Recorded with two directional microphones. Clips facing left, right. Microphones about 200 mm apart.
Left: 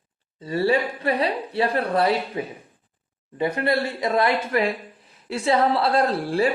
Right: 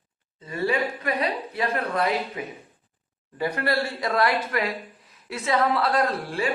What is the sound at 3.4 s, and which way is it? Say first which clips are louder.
A man's voice: left 3 dB; 20° left (ahead or behind).